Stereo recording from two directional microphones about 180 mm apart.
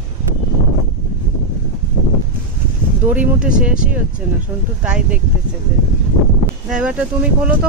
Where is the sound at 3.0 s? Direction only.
10° right (ahead or behind).